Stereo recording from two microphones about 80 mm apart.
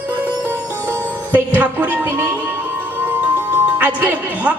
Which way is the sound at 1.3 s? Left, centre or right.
Centre.